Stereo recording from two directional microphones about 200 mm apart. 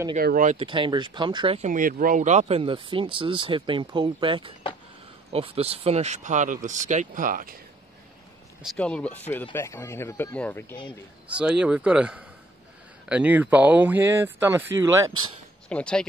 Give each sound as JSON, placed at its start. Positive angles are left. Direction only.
{"t": 0.1, "sound": "speech", "side_deg": -45}
{"t": 0.6, "sound": "speech", "side_deg": -25}
{"t": 1.7, "sound": "speech", "side_deg": -45}
{"t": 8.6, "sound": "speech", "side_deg": 5}
{"t": 11.2, "sound": "speech", "side_deg": -5}
{"t": 15.7, "sound": "speech", "side_deg": 5}